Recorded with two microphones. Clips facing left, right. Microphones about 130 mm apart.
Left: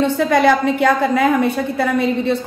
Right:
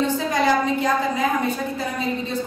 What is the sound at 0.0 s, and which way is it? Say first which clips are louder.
A woman's voice: left 7 dB; 65° left (ahead or behind).